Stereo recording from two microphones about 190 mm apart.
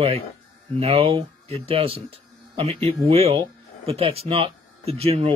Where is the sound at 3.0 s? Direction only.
30° right (ahead or behind).